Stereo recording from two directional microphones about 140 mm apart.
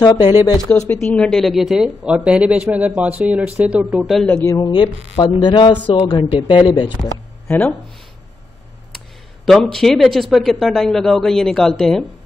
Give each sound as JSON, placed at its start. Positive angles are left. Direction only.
{"t": 0.0, "sound": "speech", "side_deg": 30}
{"t": 0.9, "sound": "a man's voice", "side_deg": 5}
{"t": 4.5, "sound": "speech", "side_deg": 30}
{"t": 5.1, "sound": "a man's voice", "side_deg": 40}
{"t": 7.4, "sound": "speech", "side_deg": 10}
{"t": 9.5, "sound": "a man's voice", "side_deg": 5}